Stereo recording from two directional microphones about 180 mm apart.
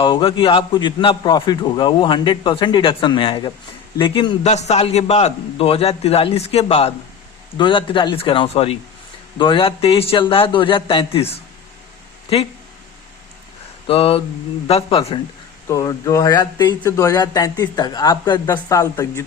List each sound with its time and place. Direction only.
0.0 s a man's voice: 30° left (ahead or behind)
13.8 s a man's voice: 30° left (ahead or behind)
15.7 s a man's voice: 20° left (ahead or behind)